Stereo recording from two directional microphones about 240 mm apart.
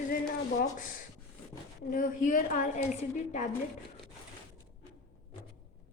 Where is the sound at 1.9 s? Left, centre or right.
Left.